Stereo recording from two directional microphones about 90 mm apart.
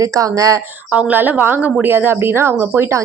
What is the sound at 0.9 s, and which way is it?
A woman's voice, 15° right (ahead or behind).